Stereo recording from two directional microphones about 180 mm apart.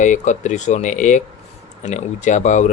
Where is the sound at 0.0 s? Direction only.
40° left (ahead or behind).